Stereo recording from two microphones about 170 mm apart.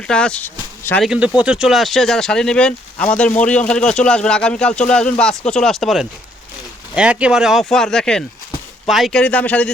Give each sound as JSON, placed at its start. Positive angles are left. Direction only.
{"t": 0.1, "sound": "speech", "side_deg": 5}
{"t": 1.0, "sound": "a man's voice", "side_deg": -5}